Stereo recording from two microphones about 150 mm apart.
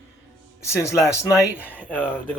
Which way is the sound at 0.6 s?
20° left (ahead or behind).